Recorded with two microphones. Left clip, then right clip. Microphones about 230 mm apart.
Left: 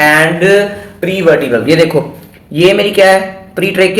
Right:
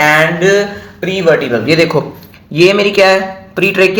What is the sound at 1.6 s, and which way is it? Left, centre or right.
Speech, right.